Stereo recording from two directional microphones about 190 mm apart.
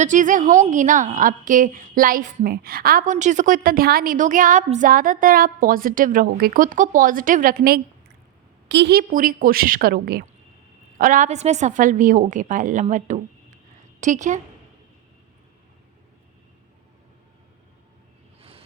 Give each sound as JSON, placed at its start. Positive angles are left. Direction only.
{"t": 0.0, "sound": "a woman's voice", "side_deg": -40}
{"t": 10.9, "sound": "a woman's voice", "side_deg": -45}
{"t": 18.3, "sound": "vehicle", "side_deg": -30}